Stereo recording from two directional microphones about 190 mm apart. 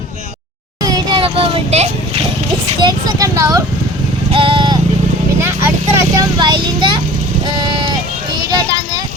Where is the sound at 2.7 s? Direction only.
20° right (ahead or behind).